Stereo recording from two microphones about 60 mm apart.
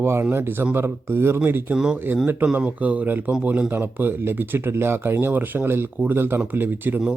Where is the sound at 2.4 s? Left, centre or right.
Right.